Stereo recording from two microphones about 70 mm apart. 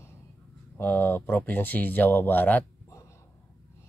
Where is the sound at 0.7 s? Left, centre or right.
Left.